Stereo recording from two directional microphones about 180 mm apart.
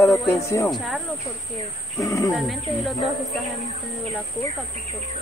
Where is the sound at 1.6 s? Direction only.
15° left (ahead or behind).